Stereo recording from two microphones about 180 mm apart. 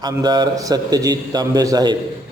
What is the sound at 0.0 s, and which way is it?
A man's voice, 25° right (ahead or behind).